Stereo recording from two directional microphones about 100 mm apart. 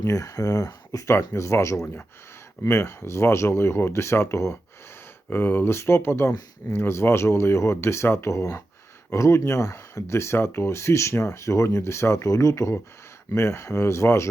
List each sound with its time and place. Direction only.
0.0 s speech: 30° left (ahead or behind)